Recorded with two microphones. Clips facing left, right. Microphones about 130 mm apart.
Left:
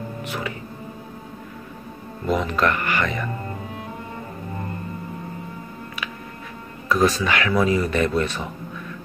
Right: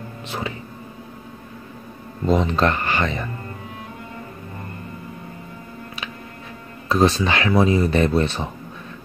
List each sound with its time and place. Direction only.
2.2 s speech: 25° right (ahead or behind)
6.9 s speech: 25° right (ahead or behind)